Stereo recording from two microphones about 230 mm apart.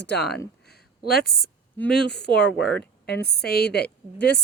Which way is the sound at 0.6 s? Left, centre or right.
Left.